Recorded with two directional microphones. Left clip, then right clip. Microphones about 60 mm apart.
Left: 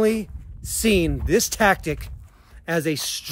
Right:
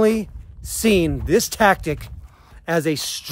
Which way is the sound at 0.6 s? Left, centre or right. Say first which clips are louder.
Right 2 dB; right.